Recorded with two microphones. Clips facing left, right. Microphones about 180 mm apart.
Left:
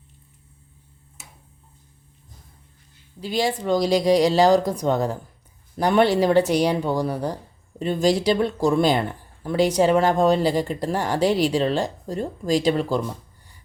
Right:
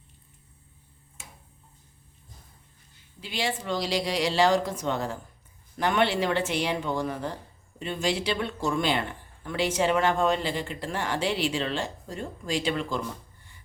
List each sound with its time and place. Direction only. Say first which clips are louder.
3.2 s speech: left 7 dB; 40° left (ahead or behind)